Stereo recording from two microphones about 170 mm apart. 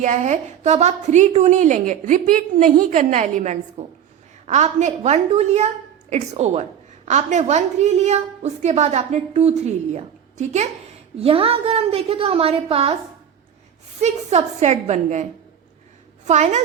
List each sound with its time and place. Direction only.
0.0 s a woman's voice: 45° right (ahead or behind)
14.0 s a woman's voice: 40° right (ahead or behind)